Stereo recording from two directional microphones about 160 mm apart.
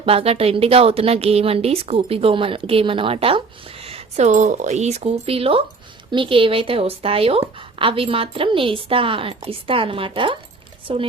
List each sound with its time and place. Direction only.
0.0 s speech: 35° right (ahead or behind)